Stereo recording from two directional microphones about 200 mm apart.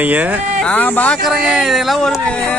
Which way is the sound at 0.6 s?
5° left (ahead or behind).